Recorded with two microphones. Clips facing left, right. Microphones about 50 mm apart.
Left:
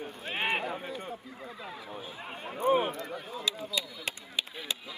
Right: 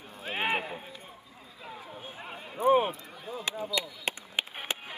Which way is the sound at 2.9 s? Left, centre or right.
Left.